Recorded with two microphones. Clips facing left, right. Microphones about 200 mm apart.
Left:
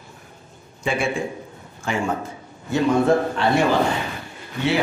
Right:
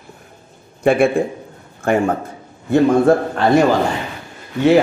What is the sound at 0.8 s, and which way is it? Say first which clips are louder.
A man's voice: right 9 dB; 55° right (ahead or behind).